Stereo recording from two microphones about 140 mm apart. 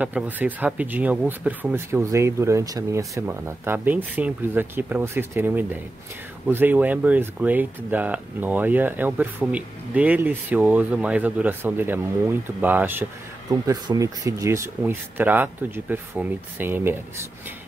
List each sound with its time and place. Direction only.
0.0 s speech: 10° right (ahead or behind)
13.5 s speech: 25° right (ahead or behind)